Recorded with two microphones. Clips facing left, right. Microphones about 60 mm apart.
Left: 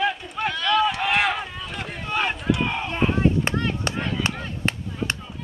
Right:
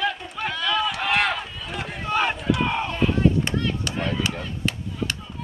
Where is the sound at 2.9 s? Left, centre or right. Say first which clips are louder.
Left 2 dB; left.